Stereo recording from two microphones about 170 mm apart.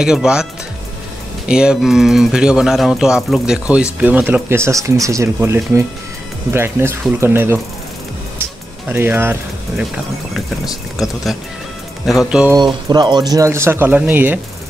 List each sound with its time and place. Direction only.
0.0 s speech: 5° right (ahead or behind)
1.5 s speech: 5° right (ahead or behind)
8.8 s speech: 10° right (ahead or behind)
12.5 s speech: 25° right (ahead or behind)